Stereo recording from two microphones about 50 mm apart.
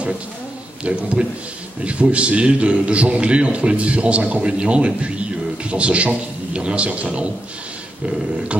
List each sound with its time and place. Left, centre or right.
0.8 s a man's voice: right